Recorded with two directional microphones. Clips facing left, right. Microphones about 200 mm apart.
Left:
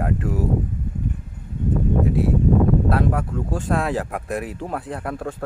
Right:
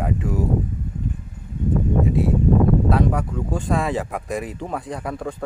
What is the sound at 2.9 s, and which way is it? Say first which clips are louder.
A man's voice: right 1 dB; centre (ahead or behind).